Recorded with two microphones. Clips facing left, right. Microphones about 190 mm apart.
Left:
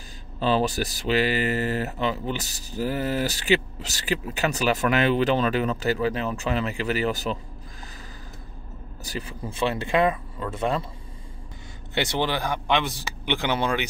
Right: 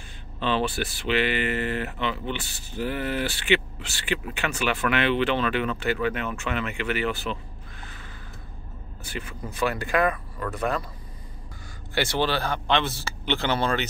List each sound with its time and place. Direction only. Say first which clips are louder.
0.4 s speech: left 3 dB; 40° left (ahead or behind)
9.0 s speech: left 2 dB; 35° left (ahead or behind)
11.9 s speech: even; 20° left (ahead or behind)